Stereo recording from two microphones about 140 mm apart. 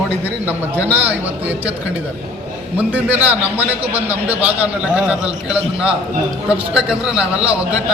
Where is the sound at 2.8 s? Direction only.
10° right (ahead or behind).